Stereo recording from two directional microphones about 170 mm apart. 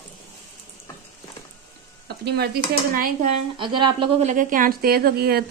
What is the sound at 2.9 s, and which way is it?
Speech, 55° right (ahead or behind).